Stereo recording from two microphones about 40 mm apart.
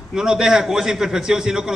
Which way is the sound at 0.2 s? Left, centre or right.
Centre.